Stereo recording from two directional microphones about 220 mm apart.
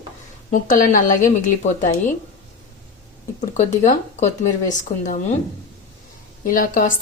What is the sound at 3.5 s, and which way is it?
Speech, 35° left (ahead or behind).